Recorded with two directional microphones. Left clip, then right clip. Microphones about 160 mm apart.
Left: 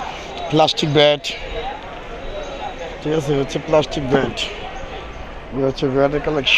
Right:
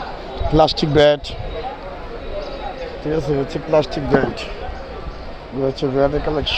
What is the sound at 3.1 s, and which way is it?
Speech, centre (ahead or behind).